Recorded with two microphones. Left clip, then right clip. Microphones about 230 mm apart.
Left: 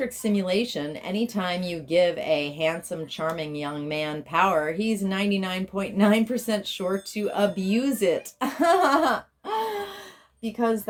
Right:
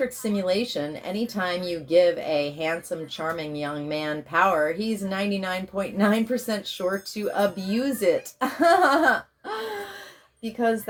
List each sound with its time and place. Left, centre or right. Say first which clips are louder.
0.2 s speech: even; left